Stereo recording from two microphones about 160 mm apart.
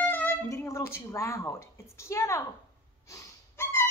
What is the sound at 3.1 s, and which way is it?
Gasp, 15° left (ahead or behind).